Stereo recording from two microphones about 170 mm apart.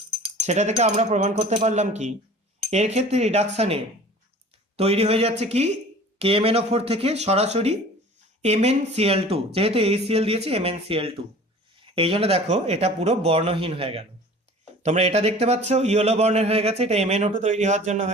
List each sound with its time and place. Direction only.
0.3 s speech: 40° right (ahead or behind)
4.8 s speech: 35° right (ahead or behind)